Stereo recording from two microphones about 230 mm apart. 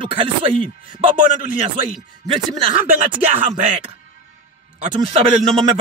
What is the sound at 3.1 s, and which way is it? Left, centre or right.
Music, right.